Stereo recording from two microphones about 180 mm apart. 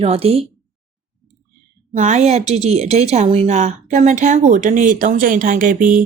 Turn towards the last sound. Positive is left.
turn(degrees=-45)  # may be behind; listen again after turning